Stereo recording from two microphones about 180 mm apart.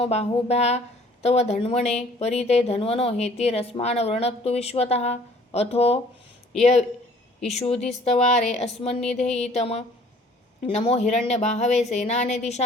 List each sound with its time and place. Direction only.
0.0 s a woman's voice: 35° left (ahead or behind)